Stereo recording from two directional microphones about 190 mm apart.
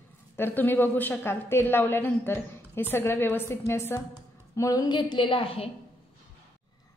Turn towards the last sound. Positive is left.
turn(degrees=30)  # may be behind; listen again after turning